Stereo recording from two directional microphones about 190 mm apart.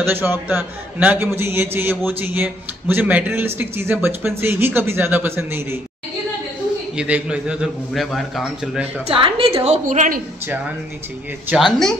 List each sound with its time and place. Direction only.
0.0 s a man's voice: 10° right (ahead or behind)
7.0 s a man's voice: 5° right (ahead or behind)
9.0 s a woman's voice: 30° right (ahead or behind)
11.4 s a man's voice: centre (ahead or behind)